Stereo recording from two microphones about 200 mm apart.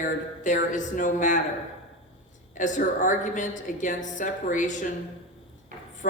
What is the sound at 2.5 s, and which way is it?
Speech, 40° left (ahead or behind).